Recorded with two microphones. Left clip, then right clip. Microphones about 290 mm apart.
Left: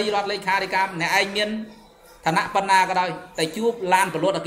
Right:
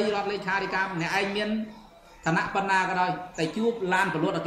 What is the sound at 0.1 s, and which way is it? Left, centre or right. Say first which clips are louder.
A man's voice: left 5 dB; centre.